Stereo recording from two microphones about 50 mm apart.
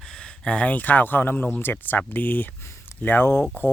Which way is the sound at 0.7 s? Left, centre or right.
Left.